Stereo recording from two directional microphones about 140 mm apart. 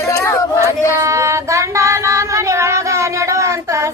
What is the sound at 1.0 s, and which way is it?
Child singing, 20° right (ahead or behind).